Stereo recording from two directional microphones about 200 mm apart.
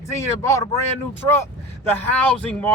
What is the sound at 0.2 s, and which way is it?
Speech, 15° left (ahead or behind).